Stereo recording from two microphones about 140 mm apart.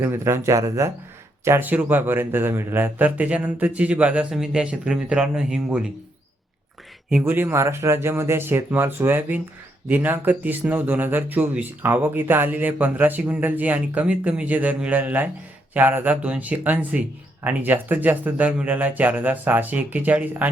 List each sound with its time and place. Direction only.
0.0 s speech: 20° right (ahead or behind)
7.3 s speech: 15° right (ahead or behind)